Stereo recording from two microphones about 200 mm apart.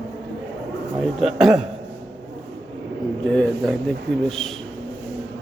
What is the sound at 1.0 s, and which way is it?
Speech, centre (ahead or behind).